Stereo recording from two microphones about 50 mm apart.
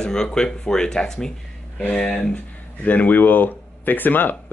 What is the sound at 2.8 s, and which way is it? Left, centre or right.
Speech, left.